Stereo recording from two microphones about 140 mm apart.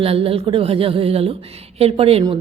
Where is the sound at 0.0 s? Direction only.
45° right (ahead or behind).